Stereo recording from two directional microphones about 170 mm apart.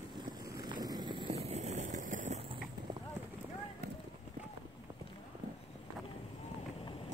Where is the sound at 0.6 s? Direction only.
20° right (ahead or behind); by 2.5 s 40° right (ahead or behind).